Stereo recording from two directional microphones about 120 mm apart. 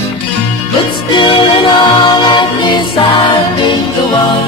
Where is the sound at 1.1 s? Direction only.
45° left (ahead or behind).